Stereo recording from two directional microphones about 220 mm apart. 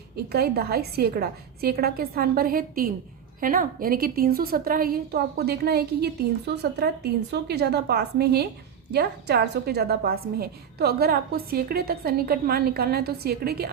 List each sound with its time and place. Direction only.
0.3 s a woman's voice: 45° right (ahead or behind)